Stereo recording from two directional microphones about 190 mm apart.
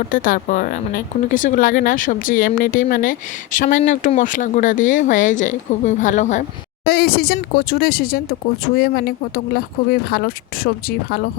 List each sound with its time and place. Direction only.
0.1 s speech: 45° left (ahead or behind)
6.8 s speech: 55° left (ahead or behind)